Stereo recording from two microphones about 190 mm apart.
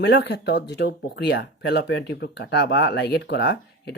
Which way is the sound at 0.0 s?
60° left (ahead or behind).